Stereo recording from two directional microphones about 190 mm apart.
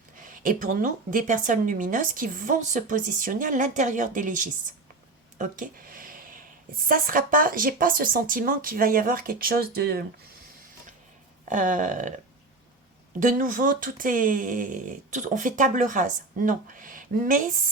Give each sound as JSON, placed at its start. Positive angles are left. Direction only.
{"t": 0.2, "sound": "a woman's voice", "side_deg": -45}
{"t": 11.4, "sound": "speech", "side_deg": -40}
{"t": 13.1, "sound": "a woman's voice", "side_deg": -45}